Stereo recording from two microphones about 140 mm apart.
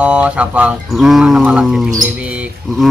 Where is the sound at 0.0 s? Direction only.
10° right (ahead or behind).